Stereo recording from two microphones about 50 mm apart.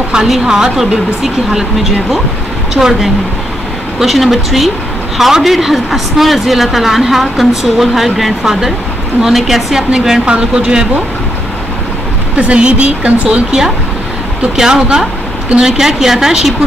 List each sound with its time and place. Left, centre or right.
0.1 s a woman's voice: centre
12.4 s a woman's voice: right
14.5 s speech: centre